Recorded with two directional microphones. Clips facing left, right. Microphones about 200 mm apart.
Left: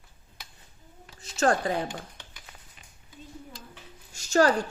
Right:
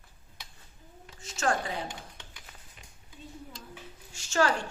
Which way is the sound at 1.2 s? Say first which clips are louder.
Left 5 dB; 35° left (ahead or behind).